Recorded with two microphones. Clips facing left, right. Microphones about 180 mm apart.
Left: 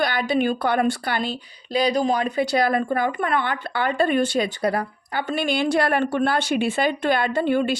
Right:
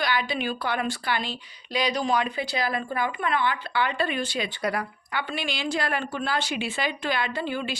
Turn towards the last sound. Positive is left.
turn(degrees=55)  # may be behind; listen again after turning